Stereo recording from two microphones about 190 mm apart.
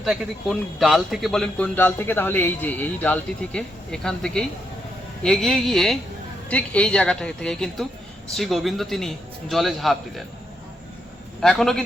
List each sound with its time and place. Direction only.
0.0 s a man's voice: centre (ahead or behind)
11.3 s a man's voice: centre (ahead or behind)